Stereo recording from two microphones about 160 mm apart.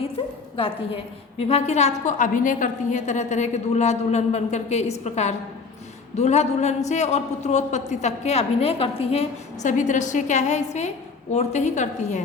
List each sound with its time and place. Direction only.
1.4 s a woman's voice: 40° left (ahead or behind)
9.6 s a woman's voice: 50° left (ahead or behind)